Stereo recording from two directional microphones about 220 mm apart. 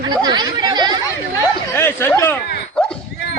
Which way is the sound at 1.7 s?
10° left (ahead or behind).